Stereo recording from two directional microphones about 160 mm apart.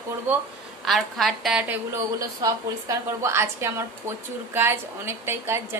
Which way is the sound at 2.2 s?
20° right (ahead or behind).